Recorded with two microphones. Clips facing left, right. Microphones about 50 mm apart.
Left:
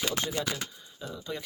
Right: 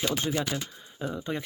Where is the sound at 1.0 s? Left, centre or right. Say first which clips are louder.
Right 7 dB; right.